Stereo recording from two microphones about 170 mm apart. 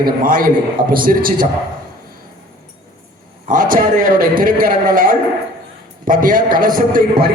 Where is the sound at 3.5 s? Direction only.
55° right (ahead or behind).